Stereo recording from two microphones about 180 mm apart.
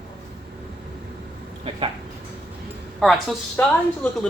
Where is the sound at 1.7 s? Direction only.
30° right (ahead or behind).